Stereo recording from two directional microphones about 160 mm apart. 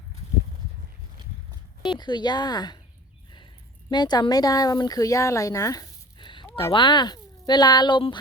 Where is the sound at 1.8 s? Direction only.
30° left (ahead or behind).